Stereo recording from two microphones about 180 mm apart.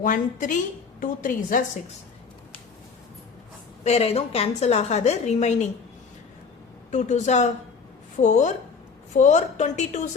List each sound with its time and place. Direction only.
0.0 s a woman's voice: 45° left (ahead or behind)
3.8 s a woman's voice: 35° left (ahead or behind)
6.9 s a woman's voice: 40° left (ahead or behind)